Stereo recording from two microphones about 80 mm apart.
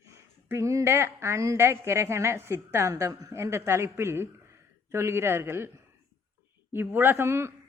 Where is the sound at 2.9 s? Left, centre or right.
Right.